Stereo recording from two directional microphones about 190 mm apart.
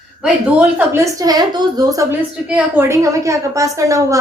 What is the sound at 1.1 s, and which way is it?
A woman's voice, 20° right (ahead or behind).